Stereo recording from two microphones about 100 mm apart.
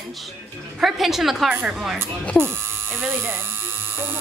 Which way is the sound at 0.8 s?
5° right (ahead or behind).